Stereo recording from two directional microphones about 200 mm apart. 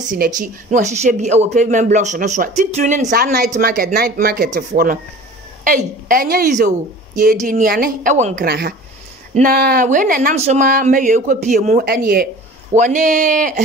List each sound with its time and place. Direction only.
0.4 s a woman's voice: 40° right (ahead or behind)
8.5 s a woman's voice: 50° right (ahead or behind)